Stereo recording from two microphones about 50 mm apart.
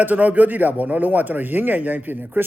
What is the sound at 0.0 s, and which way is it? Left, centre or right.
Speech, right.